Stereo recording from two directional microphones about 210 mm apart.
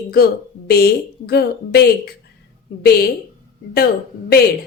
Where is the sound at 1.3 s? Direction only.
50° left (ahead or behind).